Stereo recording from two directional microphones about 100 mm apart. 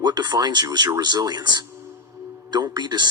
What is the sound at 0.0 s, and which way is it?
Speech, 45° right (ahead or behind).